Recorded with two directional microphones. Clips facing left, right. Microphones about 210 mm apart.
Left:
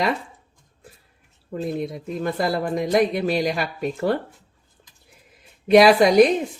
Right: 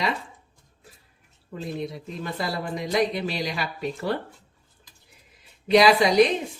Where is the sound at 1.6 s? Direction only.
50° left (ahead or behind).